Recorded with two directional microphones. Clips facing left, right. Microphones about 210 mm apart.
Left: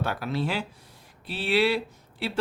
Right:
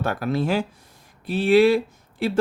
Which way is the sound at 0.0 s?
45° right (ahead or behind).